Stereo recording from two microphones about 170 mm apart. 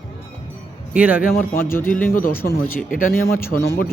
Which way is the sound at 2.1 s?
55° left (ahead or behind).